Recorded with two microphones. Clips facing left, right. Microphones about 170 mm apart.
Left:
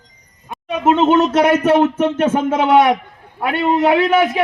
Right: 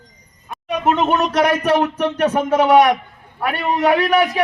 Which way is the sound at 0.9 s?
25° left (ahead or behind).